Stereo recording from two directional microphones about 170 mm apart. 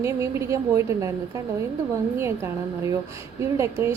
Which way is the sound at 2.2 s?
15° right (ahead or behind).